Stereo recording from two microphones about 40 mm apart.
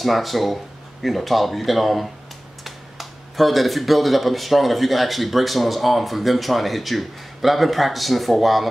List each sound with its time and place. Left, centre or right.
0.0 s speech: centre